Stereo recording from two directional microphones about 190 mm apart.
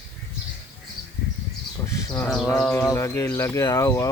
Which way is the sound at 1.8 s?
15° left (ahead or behind).